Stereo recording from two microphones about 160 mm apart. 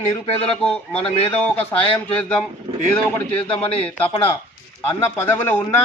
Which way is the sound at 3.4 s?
35° left (ahead or behind).